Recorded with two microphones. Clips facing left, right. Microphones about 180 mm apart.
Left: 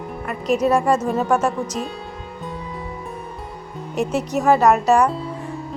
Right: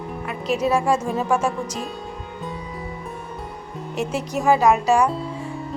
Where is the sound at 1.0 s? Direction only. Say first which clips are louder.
Left 3 dB; centre (ahead or behind).